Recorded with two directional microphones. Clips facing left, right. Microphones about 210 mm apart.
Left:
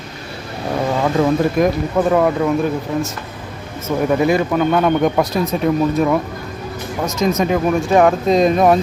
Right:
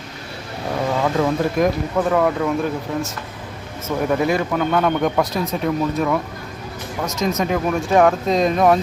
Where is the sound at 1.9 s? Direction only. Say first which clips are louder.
Left 4 dB; 15° left (ahead or behind).